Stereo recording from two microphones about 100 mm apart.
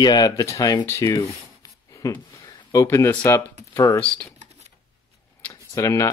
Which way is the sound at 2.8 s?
25° left (ahead or behind).